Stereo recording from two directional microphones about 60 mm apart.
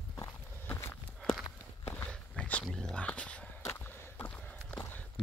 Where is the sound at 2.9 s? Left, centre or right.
Left.